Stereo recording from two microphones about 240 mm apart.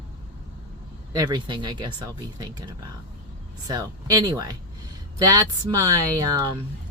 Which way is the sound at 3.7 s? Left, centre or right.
Centre.